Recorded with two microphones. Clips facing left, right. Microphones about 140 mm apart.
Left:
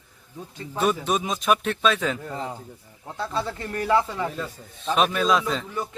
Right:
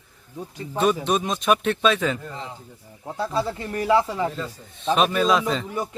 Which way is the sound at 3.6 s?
20° right (ahead or behind).